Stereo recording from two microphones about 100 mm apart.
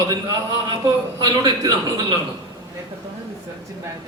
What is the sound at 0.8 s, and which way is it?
A man's voice, 40° right (ahead or behind).